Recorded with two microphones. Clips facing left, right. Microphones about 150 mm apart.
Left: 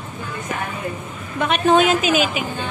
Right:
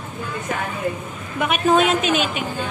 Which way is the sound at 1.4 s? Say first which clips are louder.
Left 1 dB; centre (ahead or behind).